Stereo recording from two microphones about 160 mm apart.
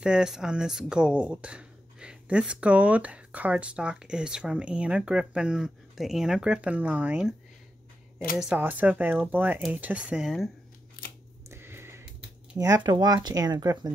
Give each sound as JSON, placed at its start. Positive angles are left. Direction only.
{"t": 0.0, "sound": "speech", "side_deg": -5}
{"t": 8.4, "sound": "speech", "side_deg": -10}
{"t": 11.5, "sound": "a sound", "side_deg": -15}
{"t": 12.5, "sound": "speech", "side_deg": -25}